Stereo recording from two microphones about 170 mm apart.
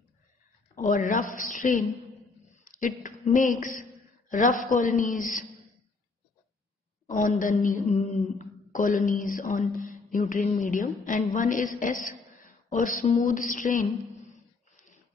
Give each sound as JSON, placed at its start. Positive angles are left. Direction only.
{"t": 0.7, "sound": "a woman's voice", "side_deg": 50}
{"t": 7.2, "sound": "a woman's voice", "side_deg": 50}